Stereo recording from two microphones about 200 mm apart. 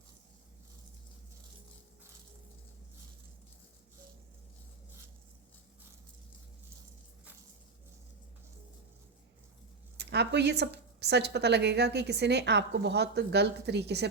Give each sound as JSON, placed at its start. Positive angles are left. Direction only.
{"t": 10.0, "sound": "a woman's voice", "side_deg": -55}